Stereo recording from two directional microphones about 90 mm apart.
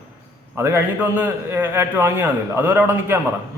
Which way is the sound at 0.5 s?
25° right (ahead or behind).